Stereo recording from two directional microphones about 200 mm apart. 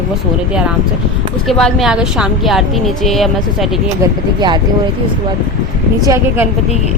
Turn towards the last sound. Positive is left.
turn(degrees=-15)  # may be behind; listen again after turning